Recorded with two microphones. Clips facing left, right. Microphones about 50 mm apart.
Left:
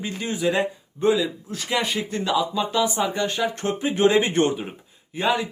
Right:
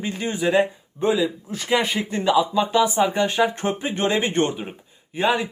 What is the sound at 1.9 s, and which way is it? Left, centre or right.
A man's voice, right.